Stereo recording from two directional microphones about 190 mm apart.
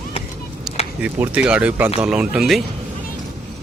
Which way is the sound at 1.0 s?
5° right (ahead or behind).